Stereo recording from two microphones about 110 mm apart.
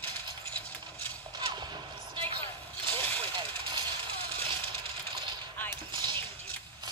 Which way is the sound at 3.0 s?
15° left (ahead or behind).